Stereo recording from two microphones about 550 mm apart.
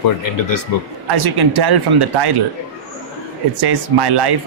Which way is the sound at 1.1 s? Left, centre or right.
Right.